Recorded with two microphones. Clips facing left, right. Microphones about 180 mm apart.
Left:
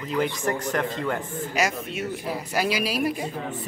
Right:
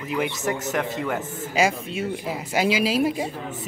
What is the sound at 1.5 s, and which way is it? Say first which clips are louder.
Speech: right 4 dB; 30° right (ahead or behind).